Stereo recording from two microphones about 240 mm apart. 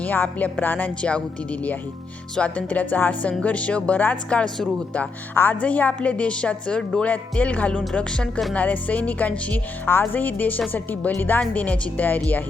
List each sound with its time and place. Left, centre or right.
0.0 s speech: centre
2.3 s speech: centre